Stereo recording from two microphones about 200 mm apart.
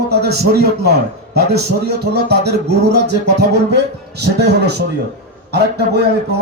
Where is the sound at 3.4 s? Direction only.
55° right (ahead or behind).